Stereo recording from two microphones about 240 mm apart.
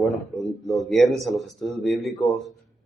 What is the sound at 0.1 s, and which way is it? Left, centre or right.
Speech, centre.